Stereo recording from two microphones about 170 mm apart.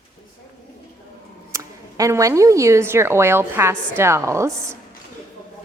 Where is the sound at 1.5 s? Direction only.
20° right (ahead or behind).